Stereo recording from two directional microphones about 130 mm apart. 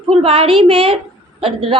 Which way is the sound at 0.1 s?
50° right (ahead or behind).